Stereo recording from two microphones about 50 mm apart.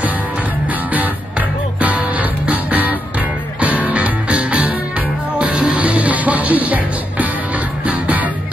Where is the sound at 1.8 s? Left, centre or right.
Right.